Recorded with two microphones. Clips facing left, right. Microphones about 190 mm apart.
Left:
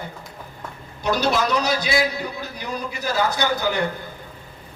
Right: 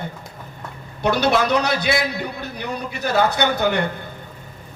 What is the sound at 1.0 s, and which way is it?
A man's voice, 60° right (ahead or behind).